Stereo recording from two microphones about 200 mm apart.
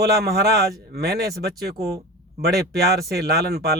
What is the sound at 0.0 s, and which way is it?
A man's voice, 50° right (ahead or behind).